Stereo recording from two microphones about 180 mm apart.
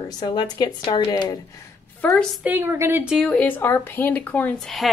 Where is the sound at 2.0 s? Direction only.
5° left (ahead or behind).